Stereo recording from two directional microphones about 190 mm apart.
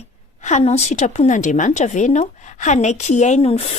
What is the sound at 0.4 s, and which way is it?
A woman's voice, 35° left (ahead or behind).